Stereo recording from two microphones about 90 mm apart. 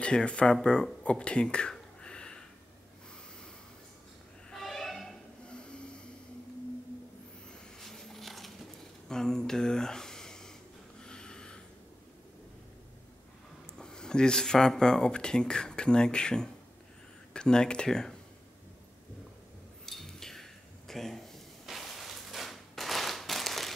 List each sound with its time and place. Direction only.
0.0 s speech: 10° left (ahead or behind)
4.5 s snort: 5° left (ahead or behind)
7.8 s a sound: 5° left (ahead or behind)
13.7 s speech: 10° left (ahead or behind)
19.9 s dishes: 5° left (ahead or behind)
21.6 s a sound: centre (ahead or behind)